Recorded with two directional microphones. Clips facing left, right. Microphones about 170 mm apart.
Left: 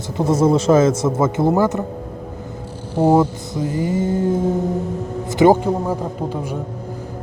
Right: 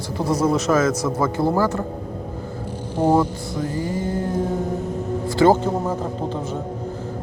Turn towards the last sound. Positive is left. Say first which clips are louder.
# left 3 dB
turn(degrees=15)  # may be behind; listen again after turning